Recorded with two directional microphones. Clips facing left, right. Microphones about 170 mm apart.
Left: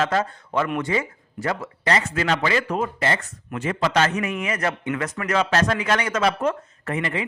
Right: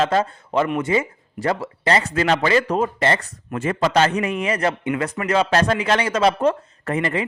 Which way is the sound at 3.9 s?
30° right (ahead or behind).